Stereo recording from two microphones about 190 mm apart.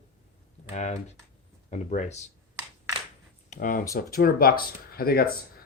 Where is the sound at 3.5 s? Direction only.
45° left (ahead or behind).